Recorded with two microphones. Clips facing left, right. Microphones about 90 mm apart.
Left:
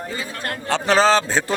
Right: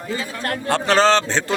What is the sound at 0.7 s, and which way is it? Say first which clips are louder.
Speech: even; centre (ahead or behind).